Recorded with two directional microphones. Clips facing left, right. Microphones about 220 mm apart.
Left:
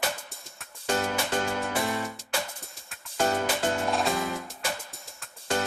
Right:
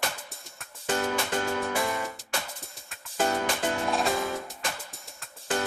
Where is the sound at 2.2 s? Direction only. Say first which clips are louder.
Left 2 dB; centre (ahead or behind).